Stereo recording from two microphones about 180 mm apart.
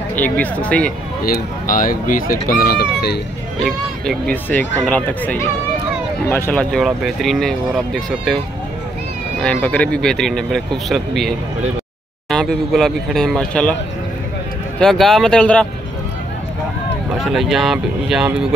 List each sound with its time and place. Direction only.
0.1 s speech: 10° left (ahead or behind)
1.2 s speech: 50° left (ahead or behind)
3.5 s speech: centre (ahead or behind)
9.4 s speech: 5° left (ahead or behind)
14.8 s speech: centre (ahead or behind)
17.2 s speech: centre (ahead or behind)